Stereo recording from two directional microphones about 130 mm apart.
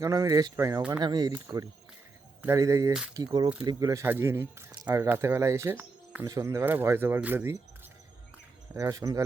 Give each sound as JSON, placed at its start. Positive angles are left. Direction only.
{"t": 0.0, "sound": "speech", "side_deg": -25}
{"t": 8.7, "sound": "speech", "side_deg": -25}